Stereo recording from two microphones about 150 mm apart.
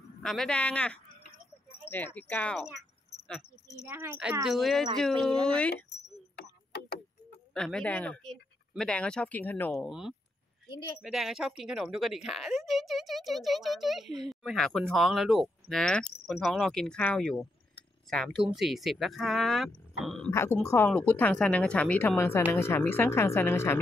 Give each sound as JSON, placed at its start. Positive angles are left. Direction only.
{"t": 0.2, "sound": "speech", "side_deg": 5}
{"t": 3.8, "sound": "a child's voice", "side_deg": -15}
{"t": 4.5, "sound": "speech", "side_deg": 0}
{"t": 6.3, "sound": "a sound", "side_deg": 90}
{"t": 7.5, "sound": "speech", "side_deg": 5}
{"t": 9.7, "sound": "speech", "side_deg": 0}
{"t": 10.7, "sound": "speech", "side_deg": 25}
{"t": 11.0, "sound": "speech", "side_deg": 0}
{"t": 20.2, "sound": "speech", "side_deg": 15}